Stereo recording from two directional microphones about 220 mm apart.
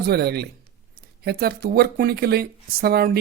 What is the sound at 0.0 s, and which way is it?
Speech, 45° right (ahead or behind).